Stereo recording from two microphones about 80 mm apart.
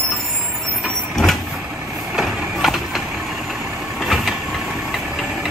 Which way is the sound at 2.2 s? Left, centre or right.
Centre.